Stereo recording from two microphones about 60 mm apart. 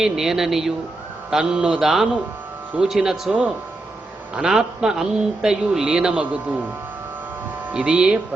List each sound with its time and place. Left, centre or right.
0.0 s a man's voice: centre
4.4 s a man's voice: centre
7.7 s a man's voice: centre